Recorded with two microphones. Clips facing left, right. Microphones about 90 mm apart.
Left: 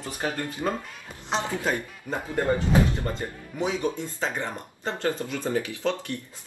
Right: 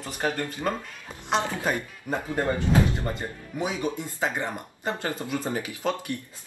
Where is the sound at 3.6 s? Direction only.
15° right (ahead or behind).